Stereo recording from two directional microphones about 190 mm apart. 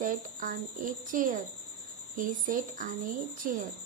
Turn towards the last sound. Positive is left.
turn(degrees=-45)  # may be behind; listen again after turning